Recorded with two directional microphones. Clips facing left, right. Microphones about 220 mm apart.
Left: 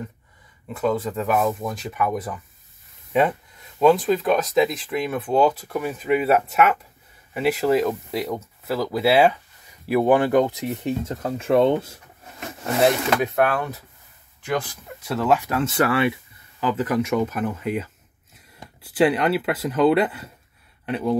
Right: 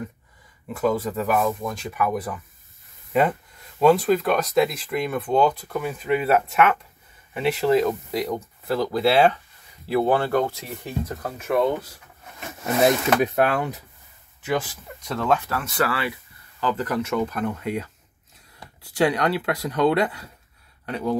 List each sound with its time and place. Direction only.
0.7 s speech: 5° right (ahead or behind); by 12.0 s 25° left (ahead or behind)
13.2 s speech: 20° right (ahead or behind)
14.4 s speech: 5° right (ahead or behind)
15.0 s speech: 5° left (ahead or behind)
15.5 s speech: 25° left (ahead or behind)
16.6 s speech: 10° left (ahead or behind)